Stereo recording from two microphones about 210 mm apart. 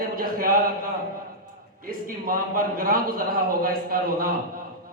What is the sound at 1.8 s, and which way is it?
A man's voice, 45° right (ahead or behind).